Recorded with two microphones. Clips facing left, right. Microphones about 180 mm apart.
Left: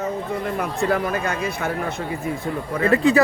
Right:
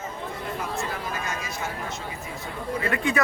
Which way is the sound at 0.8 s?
60° left (ahead or behind).